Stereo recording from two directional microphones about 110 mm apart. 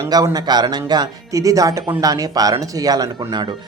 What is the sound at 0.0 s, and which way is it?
Speech, 35° right (ahead or behind).